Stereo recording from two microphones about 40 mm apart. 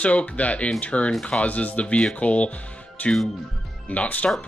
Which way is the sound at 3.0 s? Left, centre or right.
Left.